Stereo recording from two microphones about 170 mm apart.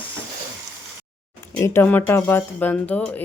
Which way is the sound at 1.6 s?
10° left (ahead or behind).